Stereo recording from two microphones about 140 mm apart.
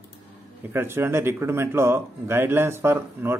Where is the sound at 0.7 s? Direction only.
15° right (ahead or behind).